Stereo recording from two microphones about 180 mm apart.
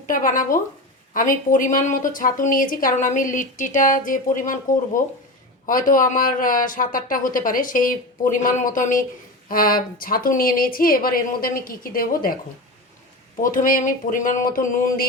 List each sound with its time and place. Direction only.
0.1 s speech: 50° left (ahead or behind)
13.4 s speech: 50° left (ahead or behind)